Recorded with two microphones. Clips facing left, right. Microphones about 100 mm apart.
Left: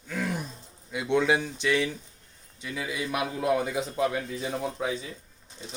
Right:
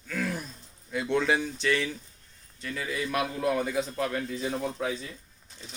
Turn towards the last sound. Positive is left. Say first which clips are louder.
# even
turn(degrees=10)  # may be behind; listen again after turning